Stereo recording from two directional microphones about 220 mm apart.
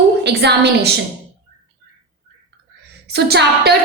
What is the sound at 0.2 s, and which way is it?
Speech, 50° right (ahead or behind).